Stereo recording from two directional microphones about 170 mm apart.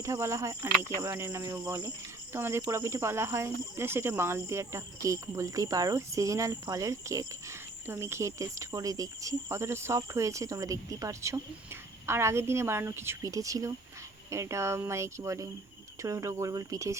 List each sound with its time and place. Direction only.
0.0 s speech: 15° right (ahead or behind)